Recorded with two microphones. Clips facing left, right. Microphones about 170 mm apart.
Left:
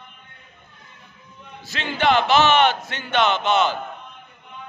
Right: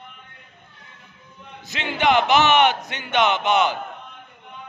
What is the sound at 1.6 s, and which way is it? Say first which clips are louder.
A man's voice: even; 20° right (ahead or behind).